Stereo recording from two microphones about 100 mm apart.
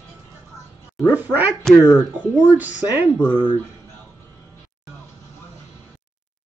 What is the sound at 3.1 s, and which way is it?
Speech, 10° left (ahead or behind).